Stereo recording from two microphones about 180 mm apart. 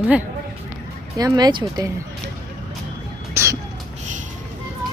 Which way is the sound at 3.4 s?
15° right (ahead or behind).